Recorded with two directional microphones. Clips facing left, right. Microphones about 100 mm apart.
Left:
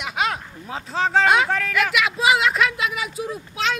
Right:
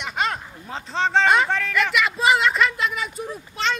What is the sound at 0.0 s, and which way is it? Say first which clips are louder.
Speech: left 1 dB; 5° left (ahead or behind).